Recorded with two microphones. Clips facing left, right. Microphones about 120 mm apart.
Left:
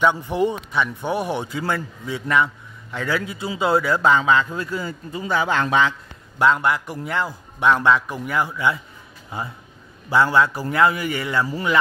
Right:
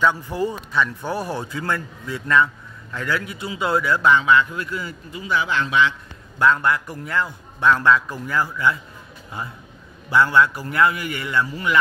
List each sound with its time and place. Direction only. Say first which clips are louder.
0.0 s a man's voice: left 2 dB; 20° left (ahead or behind); by 5.9 s 40° left (ahead or behind)
6.3 s a man's voice: even; 25° left (ahead or behind)
10.0 s a man's voice: even; 25° left (ahead or behind)